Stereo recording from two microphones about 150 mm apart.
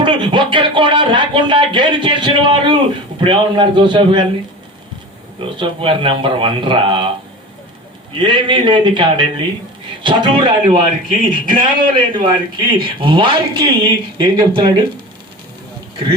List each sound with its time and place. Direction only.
0.0 s a sound: 35° right (ahead or behind)
3.2 s a man's voice: 35° right (ahead or behind)
5.4 s a man's voice: 35° right (ahead or behind)
8.2 s a man's voice: 30° right (ahead or behind)
11.1 s speech: 65° right (ahead or behind)
11.6 s a man's voice: 30° right (ahead or behind)